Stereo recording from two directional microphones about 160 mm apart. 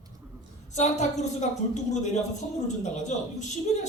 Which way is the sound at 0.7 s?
45° left (ahead or behind).